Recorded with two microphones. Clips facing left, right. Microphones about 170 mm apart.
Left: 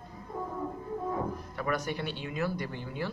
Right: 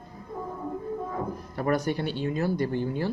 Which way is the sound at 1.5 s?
40° right (ahead or behind).